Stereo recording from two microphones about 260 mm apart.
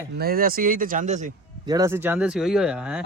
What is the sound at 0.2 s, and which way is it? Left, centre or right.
Speech, right.